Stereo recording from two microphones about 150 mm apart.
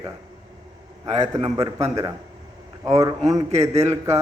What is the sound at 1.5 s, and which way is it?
A man's voice, 25° right (ahead or behind).